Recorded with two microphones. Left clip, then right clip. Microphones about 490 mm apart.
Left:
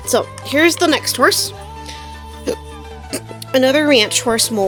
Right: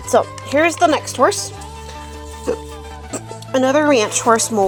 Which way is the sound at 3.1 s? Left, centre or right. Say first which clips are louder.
Left 3 dB; left.